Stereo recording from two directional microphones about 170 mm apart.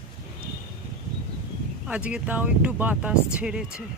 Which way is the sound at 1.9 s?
5° right (ahead or behind).